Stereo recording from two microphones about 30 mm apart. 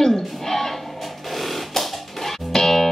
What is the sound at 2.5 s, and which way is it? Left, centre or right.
Music, left.